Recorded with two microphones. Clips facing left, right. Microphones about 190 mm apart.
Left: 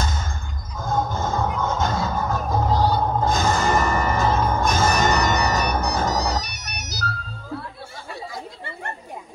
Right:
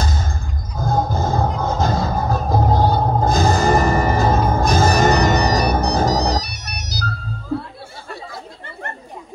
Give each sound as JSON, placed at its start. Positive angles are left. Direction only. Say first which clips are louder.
{"t": 0.0, "sound": "basketball bounce", "louder": "right 3 dB", "side_deg": -35}
{"t": 0.7, "sound": "music", "louder": "right 4 dB", "side_deg": -35}
{"t": 2.7, "sound": "vehicle", "louder": "right 2 dB", "side_deg": -50}
{"t": 3.0, "sound": "music", "louder": "right 4 dB", "side_deg": -35}